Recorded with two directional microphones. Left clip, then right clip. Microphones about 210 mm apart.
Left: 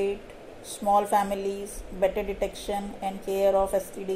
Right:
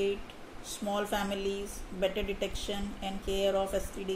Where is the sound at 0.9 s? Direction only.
Centre (ahead or behind).